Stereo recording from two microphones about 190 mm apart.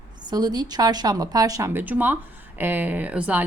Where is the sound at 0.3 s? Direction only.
20° right (ahead or behind).